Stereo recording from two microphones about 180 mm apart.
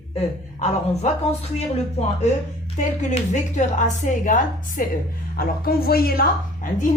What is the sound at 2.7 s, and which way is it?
A woman's voice, 45° left (ahead or behind).